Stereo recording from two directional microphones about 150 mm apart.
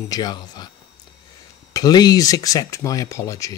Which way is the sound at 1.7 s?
25° left (ahead or behind).